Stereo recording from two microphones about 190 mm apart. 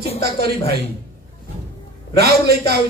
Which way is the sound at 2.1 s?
55° right (ahead or behind).